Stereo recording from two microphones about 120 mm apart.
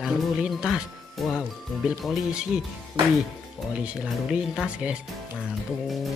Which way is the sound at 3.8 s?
10° right (ahead or behind).